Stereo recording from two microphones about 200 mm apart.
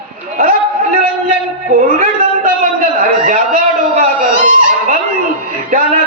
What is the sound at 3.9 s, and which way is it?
Dog, 45° right (ahead or behind).